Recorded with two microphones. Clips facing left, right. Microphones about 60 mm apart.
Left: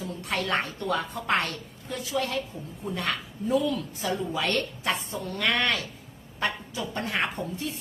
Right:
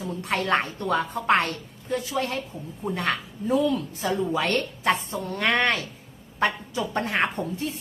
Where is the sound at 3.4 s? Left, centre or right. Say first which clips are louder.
Right 3 dB; right.